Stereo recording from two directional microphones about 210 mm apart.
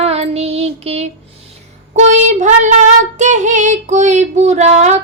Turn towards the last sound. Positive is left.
turn(degrees=-35)  # may be behind; listen again after turning